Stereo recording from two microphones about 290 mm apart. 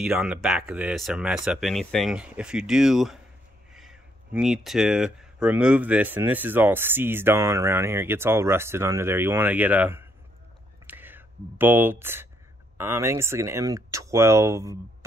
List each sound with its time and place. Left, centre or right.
0.0 s speech: centre
10.9 s whispering: centre
12.7 s speech: centre